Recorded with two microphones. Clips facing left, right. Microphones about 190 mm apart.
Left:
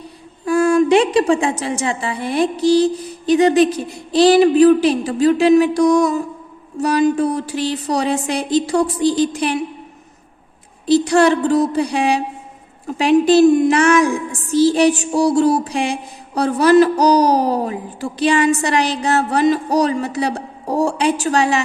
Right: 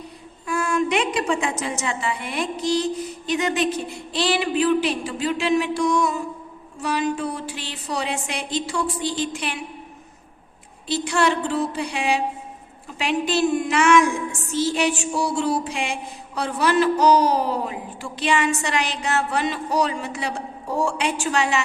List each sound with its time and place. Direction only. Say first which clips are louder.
0.4 s mantra: left 9 dB; 35° left (ahead or behind)
10.8 s mantra: left 9 dB; 40° left (ahead or behind)